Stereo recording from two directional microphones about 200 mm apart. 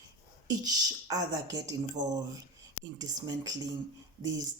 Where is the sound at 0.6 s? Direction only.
20° right (ahead or behind).